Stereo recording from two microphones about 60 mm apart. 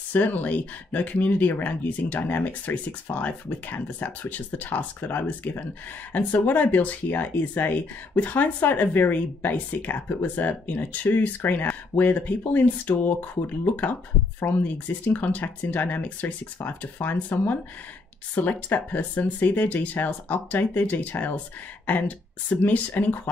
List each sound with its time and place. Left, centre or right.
0.1 s speech: left